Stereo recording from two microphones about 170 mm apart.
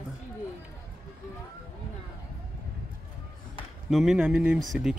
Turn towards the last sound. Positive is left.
turn(degrees=0)  # may be behind; listen again after turning